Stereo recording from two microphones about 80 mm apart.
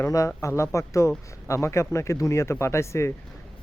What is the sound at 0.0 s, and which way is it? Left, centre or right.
Speech, left.